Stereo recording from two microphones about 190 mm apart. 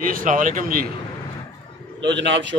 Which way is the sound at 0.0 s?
45° right (ahead or behind).